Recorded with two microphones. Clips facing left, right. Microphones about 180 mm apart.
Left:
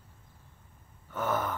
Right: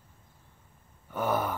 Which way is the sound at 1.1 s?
10° right (ahead or behind).